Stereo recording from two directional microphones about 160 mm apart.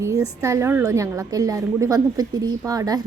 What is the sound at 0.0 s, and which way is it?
A woman's voice, 20° right (ahead or behind).